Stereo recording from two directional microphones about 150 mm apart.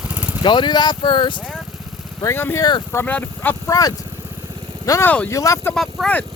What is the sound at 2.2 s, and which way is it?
Speech, 15° left (ahead or behind).